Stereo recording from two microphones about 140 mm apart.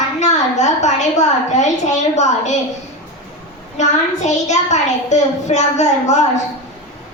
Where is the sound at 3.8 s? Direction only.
55° left (ahead or behind).